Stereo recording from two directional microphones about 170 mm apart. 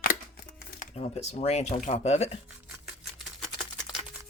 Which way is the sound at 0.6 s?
60° left (ahead or behind).